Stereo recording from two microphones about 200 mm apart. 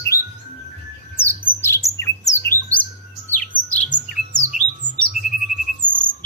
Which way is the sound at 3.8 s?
45° right (ahead or behind).